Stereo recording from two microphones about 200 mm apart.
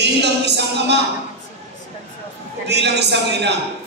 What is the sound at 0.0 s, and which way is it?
Speech, 60° right (ahead or behind).